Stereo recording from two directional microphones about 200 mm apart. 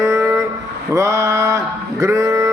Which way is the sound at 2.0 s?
15° right (ahead or behind).